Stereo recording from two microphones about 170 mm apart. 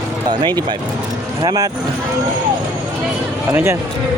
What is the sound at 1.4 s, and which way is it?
Speech, 25° right (ahead or behind).